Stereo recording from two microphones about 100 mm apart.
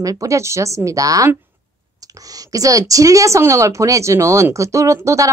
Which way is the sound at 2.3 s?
35° right (ahead or behind).